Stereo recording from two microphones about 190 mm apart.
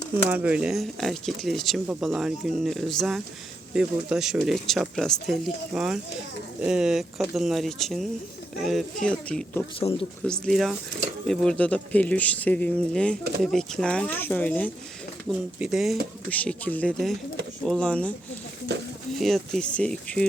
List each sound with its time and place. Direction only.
0.3 s speech: 10° right (ahead or behind); by 14.7 s 10° left (ahead or behind)
15.5 s speech: 5° right (ahead or behind)
18.7 s speech: 60° right (ahead or behind)
19.2 s speech: centre (ahead or behind)